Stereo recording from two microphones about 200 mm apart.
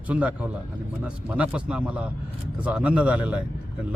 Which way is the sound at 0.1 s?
5° right (ahead or behind).